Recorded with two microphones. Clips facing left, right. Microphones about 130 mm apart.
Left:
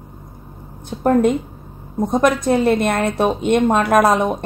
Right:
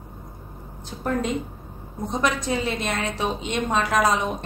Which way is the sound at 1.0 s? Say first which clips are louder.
Left 10 dB; 55° left (ahead or behind).